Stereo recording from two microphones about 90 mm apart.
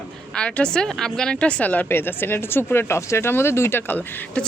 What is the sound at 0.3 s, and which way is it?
A woman's voice, 10° left (ahead or behind).